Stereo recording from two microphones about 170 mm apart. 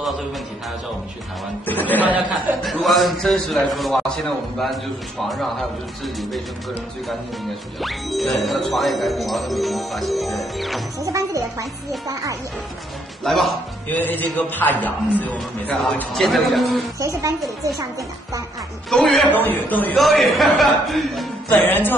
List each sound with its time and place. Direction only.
1.7 s speech: 10° left (ahead or behind)
2.0 s speech: 10° right (ahead or behind)
7.8 s speech: centre (ahead or behind)
11.0 s speech: 20° right (ahead or behind)
13.2 s speech: centre (ahead or behind)
17.0 s speech: 20° right (ahead or behind)
18.9 s speech: centre (ahead or behind)
21.5 s speech: 10° left (ahead or behind)